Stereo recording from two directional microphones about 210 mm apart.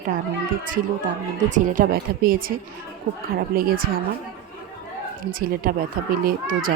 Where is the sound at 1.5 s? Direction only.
35° right (ahead or behind).